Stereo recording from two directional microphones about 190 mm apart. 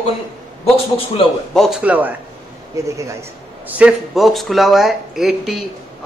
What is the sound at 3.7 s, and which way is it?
Speech, 5° right (ahead or behind).